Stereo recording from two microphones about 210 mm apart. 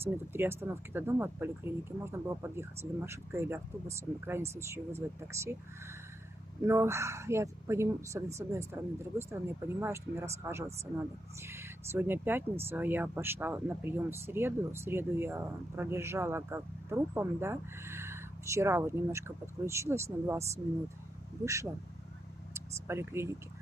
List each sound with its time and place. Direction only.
0.0 s speech: 10° right (ahead or behind)
6.6 s speech: 10° right (ahead or behind)
22.5 s speech: 10° right (ahead or behind)